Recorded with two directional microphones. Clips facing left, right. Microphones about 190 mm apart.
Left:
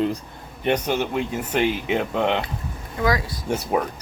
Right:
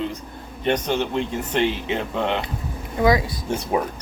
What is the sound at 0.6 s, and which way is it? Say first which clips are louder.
Speech: even; 10° left (ahead or behind).